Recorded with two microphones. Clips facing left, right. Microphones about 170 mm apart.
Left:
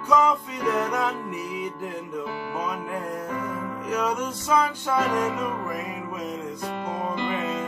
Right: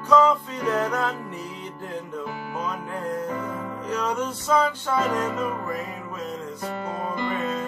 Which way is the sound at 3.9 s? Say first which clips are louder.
Even; 10° left (ahead or behind).